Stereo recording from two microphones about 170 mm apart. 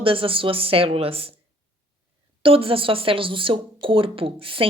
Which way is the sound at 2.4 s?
30° right (ahead or behind).